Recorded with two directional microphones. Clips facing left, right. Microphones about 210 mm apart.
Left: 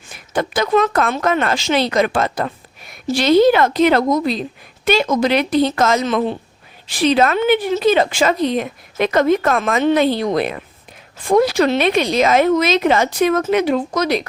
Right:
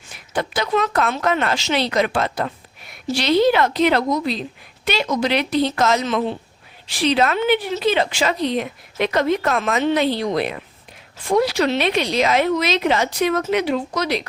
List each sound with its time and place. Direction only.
0.1 s a woman's voice: 45° left (ahead or behind)